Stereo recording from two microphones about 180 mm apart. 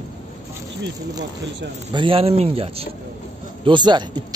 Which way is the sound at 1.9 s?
30° right (ahead or behind).